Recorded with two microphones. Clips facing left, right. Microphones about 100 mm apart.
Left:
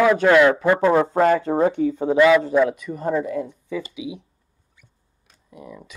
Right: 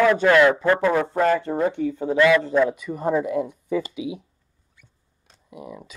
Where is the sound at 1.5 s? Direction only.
50° left (ahead or behind).